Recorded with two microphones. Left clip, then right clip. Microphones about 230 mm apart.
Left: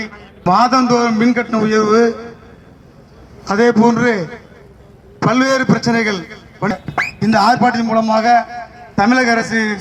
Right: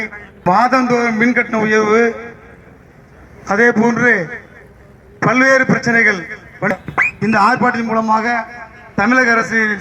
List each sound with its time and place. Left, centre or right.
0.0 s a man's voice: left
3.4 s a man's voice: left